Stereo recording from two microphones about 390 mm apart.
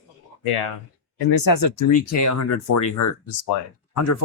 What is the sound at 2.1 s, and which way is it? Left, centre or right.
Speech, left.